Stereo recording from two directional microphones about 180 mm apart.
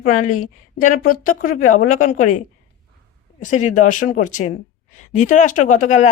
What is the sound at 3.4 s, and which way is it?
A woman's voice, 45° left (ahead or behind).